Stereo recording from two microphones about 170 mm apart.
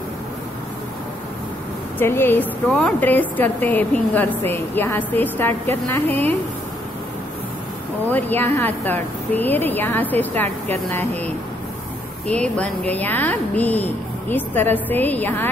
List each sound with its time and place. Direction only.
2.0 s a woman's voice: 10° left (ahead or behind)
8.1 s a woman's voice: 10° left (ahead or behind)